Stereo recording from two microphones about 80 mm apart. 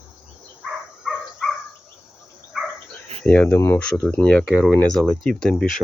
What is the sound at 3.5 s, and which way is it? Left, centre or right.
Speech, left.